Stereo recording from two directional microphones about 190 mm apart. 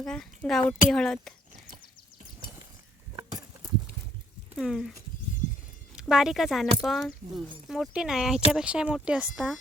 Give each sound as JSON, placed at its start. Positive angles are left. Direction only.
{"t": 0.0, "sound": "speech", "side_deg": 5}
{"t": 3.2, "sound": "a sound", "side_deg": -20}
{"t": 4.5, "sound": "speech", "side_deg": 0}
{"t": 6.0, "sound": "speech", "side_deg": -5}